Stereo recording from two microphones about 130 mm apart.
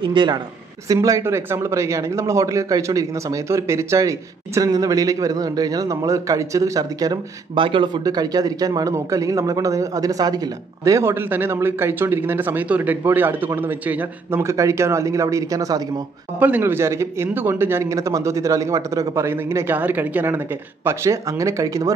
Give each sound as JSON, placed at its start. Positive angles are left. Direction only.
{"t": 0.1, "sound": "speech", "side_deg": -35}
{"t": 0.8, "sound": "speech", "side_deg": -25}
{"t": 16.3, "sound": "speech", "side_deg": -15}